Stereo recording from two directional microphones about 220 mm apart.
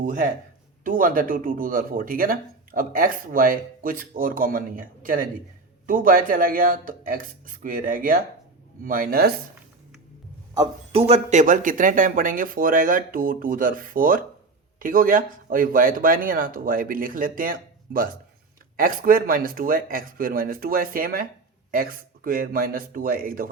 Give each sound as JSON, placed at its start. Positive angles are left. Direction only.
{"t": 0.0, "sound": "speech", "side_deg": -35}
{"t": 10.5, "sound": "a man's voice", "side_deg": -15}
{"t": 11.1, "sound": "speech", "side_deg": -35}